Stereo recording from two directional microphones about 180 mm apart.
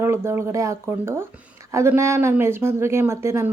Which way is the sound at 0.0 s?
15° right (ahead or behind).